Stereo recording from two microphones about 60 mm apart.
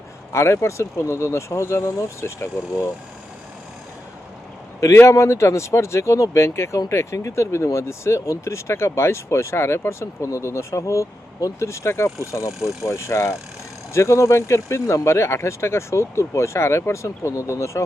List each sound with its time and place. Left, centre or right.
0.3 s speech: left
5.0 s speech: left
11.6 s speech: left
12.5 s speech: centre
12.8 s speech: left